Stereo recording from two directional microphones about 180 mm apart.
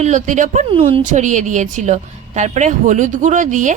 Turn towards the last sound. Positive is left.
turn(degrees=-45)  # may be behind; listen again after turning